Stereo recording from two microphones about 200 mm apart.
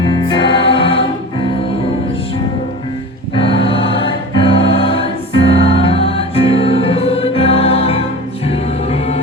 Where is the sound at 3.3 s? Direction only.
25° left (ahead or behind).